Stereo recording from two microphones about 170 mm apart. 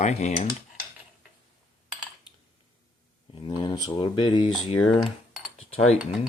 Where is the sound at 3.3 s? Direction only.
25° left (ahead or behind).